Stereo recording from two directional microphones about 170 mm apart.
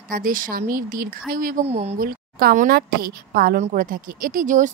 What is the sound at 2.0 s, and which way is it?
Speech, 60° right (ahead or behind).